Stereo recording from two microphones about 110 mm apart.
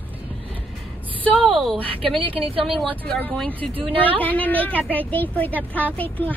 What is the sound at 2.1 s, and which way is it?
Speech, 55° right (ahead or behind).